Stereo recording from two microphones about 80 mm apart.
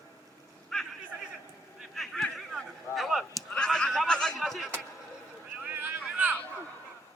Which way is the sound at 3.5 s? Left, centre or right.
Centre.